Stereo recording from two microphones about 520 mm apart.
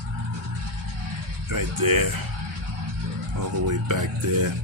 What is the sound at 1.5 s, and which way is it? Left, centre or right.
Speech, right.